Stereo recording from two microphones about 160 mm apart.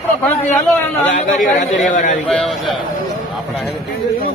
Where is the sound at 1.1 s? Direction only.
55° left (ahead or behind).